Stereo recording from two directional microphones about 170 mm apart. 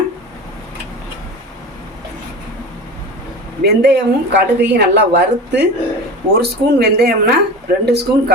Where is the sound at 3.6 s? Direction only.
75° right (ahead or behind).